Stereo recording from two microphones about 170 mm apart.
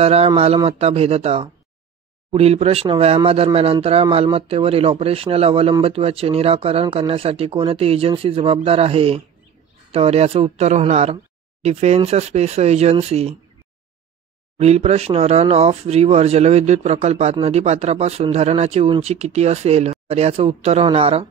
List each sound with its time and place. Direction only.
0.0 s speech: 35° right (ahead or behind)
14.6 s speech: 40° right (ahead or behind)